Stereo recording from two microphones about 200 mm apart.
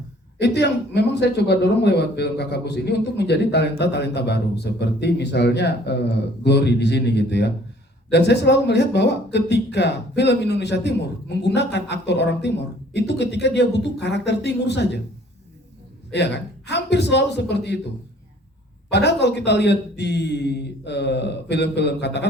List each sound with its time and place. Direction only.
0.3 s a man's voice: 55° left (ahead or behind)
16.1 s a man's voice: 60° left (ahead or behind)
18.9 s a man's voice: 60° left (ahead or behind)